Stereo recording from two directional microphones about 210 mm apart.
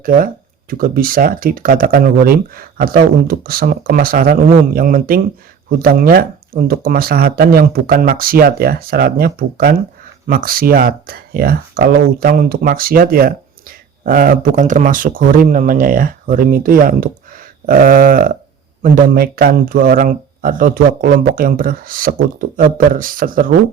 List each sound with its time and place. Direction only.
0.0 s speech: 40° right (ahead or behind)